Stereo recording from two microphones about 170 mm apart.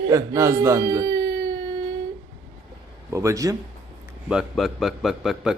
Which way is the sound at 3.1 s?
20° right (ahead or behind).